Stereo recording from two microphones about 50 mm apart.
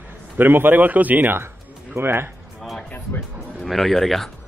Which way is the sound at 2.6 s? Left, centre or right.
Centre.